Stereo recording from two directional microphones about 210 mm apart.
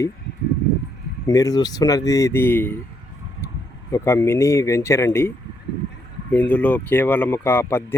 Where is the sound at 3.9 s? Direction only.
15° left (ahead or behind).